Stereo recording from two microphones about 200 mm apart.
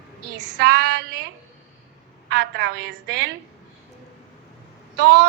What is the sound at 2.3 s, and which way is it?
A woman's voice, 50° right (ahead or behind).